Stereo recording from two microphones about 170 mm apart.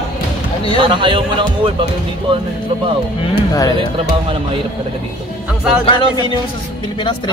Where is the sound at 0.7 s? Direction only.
30° right (ahead or behind).